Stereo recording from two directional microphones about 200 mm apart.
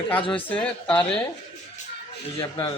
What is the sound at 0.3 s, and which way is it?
Speech, 5° left (ahead or behind).